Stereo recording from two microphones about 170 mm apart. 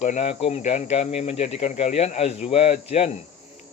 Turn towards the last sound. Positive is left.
turn(degrees=40)  # may be behind; listen again after turning